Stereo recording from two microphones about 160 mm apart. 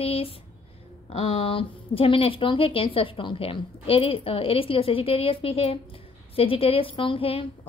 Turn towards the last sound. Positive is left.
turn(degrees=35)  # may be behind; listen again after turning